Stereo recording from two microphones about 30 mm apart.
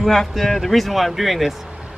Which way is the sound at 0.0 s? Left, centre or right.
Centre.